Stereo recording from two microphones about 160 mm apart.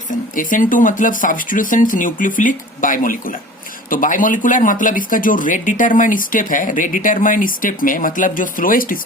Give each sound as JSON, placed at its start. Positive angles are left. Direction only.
{"t": 0.1, "sound": "speech", "side_deg": 55}